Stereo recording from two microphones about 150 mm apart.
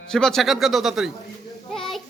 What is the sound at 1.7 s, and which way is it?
Child singing, 5° left (ahead or behind).